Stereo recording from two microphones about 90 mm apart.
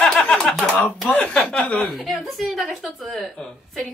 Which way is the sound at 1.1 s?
15° left (ahead or behind).